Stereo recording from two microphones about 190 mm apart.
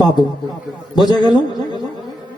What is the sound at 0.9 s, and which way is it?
Speech, 20° left (ahead or behind).